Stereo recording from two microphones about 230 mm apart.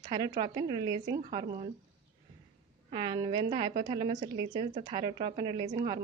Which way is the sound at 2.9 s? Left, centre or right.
Right.